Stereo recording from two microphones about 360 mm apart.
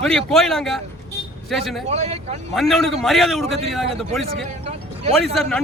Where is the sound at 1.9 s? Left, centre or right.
Centre.